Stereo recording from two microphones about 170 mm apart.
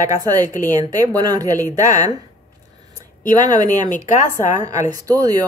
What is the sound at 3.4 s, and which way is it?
Speech, 20° right (ahead or behind).